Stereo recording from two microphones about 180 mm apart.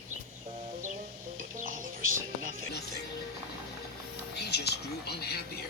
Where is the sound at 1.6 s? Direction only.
50° right (ahead or behind).